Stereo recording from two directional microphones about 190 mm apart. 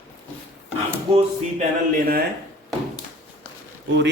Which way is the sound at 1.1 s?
30° right (ahead or behind).